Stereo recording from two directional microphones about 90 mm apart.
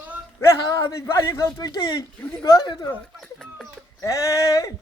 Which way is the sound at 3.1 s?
5° left (ahead or behind).